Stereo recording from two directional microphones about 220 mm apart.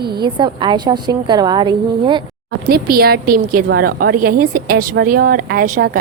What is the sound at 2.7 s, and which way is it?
A woman's voice, 45° right (ahead or behind).